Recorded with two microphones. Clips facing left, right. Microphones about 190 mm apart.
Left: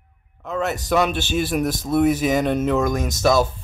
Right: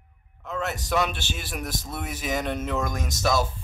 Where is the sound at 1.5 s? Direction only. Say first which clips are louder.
Left 11 dB; 70° left (ahead or behind).